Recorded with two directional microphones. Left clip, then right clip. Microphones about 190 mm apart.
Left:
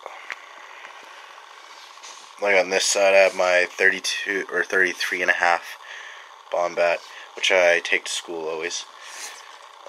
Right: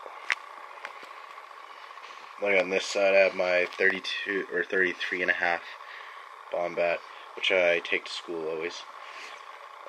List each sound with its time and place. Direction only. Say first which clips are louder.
2.4 s speech: left 6 dB; 15° left (ahead or behind)